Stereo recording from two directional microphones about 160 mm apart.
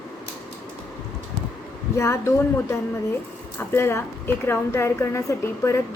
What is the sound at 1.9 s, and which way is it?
A woman's voice, 15° left (ahead or behind).